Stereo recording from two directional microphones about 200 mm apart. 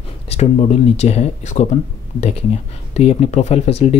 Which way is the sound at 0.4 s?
30° left (ahead or behind).